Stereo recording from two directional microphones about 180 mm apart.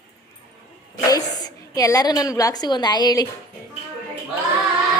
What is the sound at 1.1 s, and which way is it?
A woman's voice, 20° left (ahead or behind).